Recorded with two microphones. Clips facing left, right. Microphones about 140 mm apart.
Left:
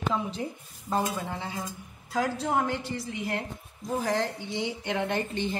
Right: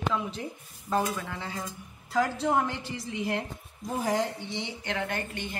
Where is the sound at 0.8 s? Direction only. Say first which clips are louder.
Even; 25° left (ahead or behind).